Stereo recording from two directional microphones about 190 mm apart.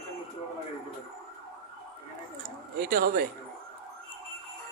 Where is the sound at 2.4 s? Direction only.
50° right (ahead or behind).